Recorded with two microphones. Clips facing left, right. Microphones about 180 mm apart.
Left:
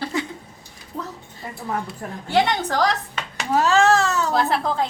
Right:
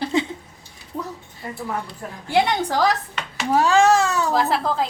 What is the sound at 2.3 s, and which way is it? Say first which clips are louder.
A woman's voice: right 1 dB; 10° right (ahead or behind).